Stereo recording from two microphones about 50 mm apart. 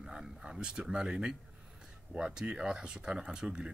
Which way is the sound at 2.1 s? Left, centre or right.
Centre.